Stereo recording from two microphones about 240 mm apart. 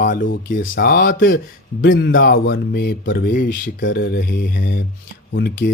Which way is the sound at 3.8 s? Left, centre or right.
Left.